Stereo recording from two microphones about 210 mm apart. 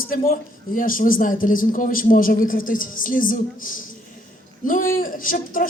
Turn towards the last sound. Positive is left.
turn(degrees=40)  # may be behind; listen again after turning